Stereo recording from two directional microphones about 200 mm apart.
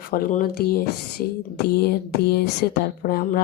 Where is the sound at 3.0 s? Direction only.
50° left (ahead or behind).